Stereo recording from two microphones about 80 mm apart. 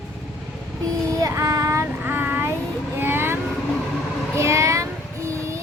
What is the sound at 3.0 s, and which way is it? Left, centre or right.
Vehicle, right.